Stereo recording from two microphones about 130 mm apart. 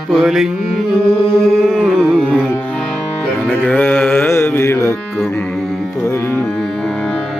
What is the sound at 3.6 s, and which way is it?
Carnatic music, 15° left (ahead or behind).